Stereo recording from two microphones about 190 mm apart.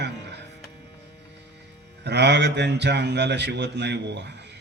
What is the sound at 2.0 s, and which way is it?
A man's voice, 65° right (ahead or behind).